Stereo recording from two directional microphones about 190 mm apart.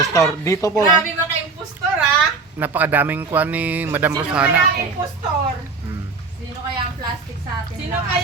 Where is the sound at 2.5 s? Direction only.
10° right (ahead or behind).